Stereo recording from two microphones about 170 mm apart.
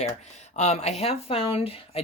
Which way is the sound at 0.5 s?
40° left (ahead or behind).